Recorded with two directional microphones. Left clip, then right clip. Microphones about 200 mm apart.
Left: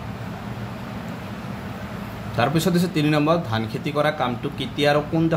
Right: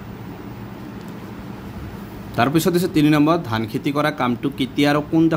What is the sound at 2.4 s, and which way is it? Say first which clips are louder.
A man's voice: right 3 dB; 35° right (ahead or behind).